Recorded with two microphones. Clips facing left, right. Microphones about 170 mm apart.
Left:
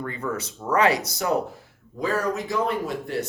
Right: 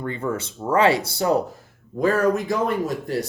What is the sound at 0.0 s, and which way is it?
Speech, 30° right (ahead or behind).